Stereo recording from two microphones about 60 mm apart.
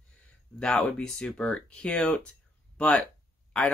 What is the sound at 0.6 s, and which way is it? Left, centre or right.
Speech, centre.